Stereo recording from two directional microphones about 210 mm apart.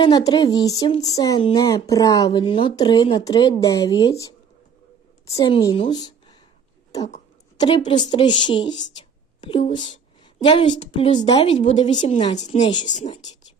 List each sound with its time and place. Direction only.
0.0 s a woman's voice: 20° left (ahead or behind)
7.8 s a woman's voice: 35° left (ahead or behind)
8.1 s a woman's voice: 20° left (ahead or behind)